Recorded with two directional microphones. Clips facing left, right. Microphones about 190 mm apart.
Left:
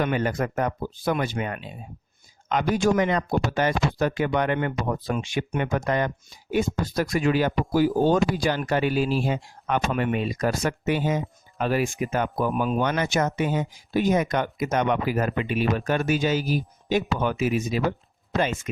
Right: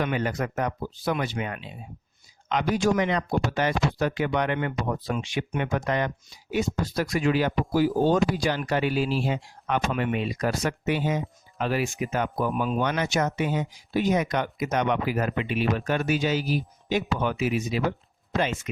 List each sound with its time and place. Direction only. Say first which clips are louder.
0.0 s speech: left 2 dB; 45° left (ahead or behind)